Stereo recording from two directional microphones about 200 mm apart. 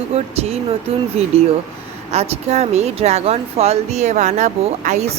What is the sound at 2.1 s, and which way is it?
Speech, 30° right (ahead or behind).